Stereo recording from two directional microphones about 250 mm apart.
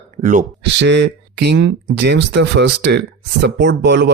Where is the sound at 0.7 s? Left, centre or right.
Right.